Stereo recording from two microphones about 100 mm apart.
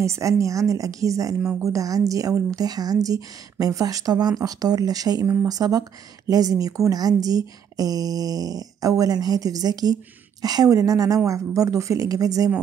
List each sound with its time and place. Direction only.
0.0 s a woman's voice: 30° right (ahead or behind)
5.2 s speech: 25° right (ahead or behind)
5.5 s a woman's voice: 40° right (ahead or behind)